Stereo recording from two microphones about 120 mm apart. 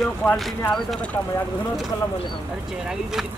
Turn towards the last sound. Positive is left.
turn(degrees=-5)  # may be behind; listen again after turning